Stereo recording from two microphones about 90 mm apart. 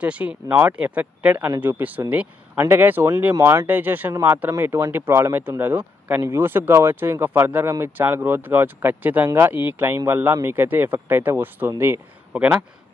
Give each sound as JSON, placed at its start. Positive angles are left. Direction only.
{"t": 0.0, "sound": "speech", "side_deg": -15}
{"t": 3.6, "sound": "speech", "side_deg": -20}
{"t": 12.3, "sound": "speech", "side_deg": -15}